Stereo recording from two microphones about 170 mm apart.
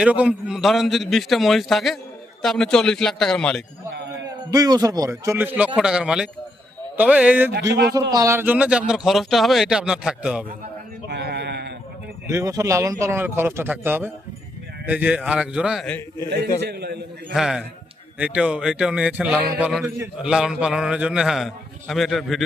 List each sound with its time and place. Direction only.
0.0 s a man's voice: 10° right (ahead or behind)
4.5 s a man's voice: 20° right (ahead or behind); by 10.4 s 5° right (ahead or behind)
11.1 s sheep: 75° right (ahead or behind)
12.3 s a man's voice: 20° right (ahead or behind); by 15.9 s 5° right (ahead or behind)
15.9 s a man's voice: 15° left (ahead or behind)
16.6 s a man's voice: 75° right (ahead or behind)
17.3 s a man's voice: 5° right (ahead or behind)